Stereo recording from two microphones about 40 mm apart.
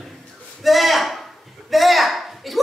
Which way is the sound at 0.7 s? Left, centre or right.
Centre.